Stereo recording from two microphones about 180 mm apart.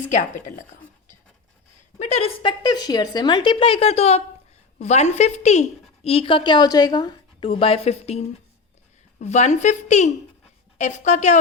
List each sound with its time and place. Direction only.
0.1 s speech: 40° left (ahead or behind)
2.0 s a woman's voice: 35° left (ahead or behind)